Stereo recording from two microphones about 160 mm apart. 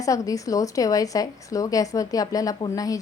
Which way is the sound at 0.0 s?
20° left (ahead or behind).